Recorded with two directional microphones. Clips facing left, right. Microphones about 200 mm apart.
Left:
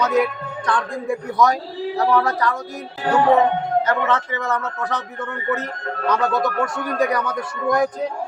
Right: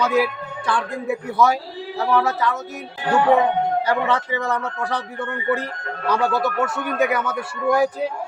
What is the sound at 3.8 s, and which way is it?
Speech, 10° right (ahead or behind).